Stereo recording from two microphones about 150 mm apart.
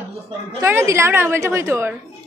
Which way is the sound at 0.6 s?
15° right (ahead or behind).